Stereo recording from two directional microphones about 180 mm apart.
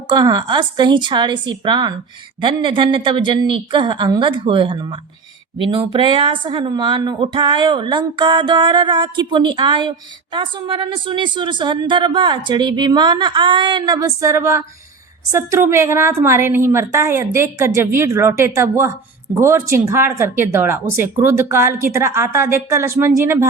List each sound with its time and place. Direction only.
0.2 s a woman's voice: 25° right (ahead or behind)